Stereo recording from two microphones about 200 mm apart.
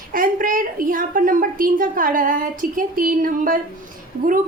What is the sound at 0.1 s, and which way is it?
A woman's voice, 45° right (ahead or behind).